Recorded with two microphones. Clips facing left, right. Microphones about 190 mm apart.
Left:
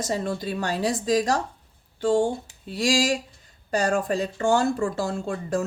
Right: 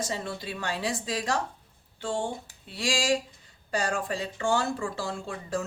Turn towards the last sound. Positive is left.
turn(degrees=45)  # may be behind; listen again after turning